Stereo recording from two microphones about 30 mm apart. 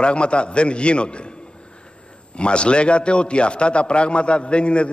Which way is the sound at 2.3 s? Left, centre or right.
Left.